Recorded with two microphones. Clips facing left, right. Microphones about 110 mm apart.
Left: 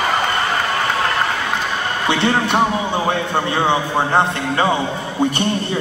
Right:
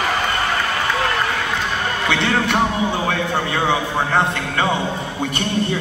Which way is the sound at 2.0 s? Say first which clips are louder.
Left 3 dB; 20° left (ahead or behind).